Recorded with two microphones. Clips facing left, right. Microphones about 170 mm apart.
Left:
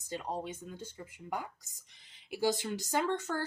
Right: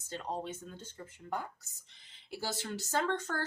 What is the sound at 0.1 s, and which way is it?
A woman's voice, 10° left (ahead or behind).